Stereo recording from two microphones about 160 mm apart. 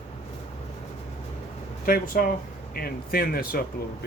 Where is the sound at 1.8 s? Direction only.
60° left (ahead or behind).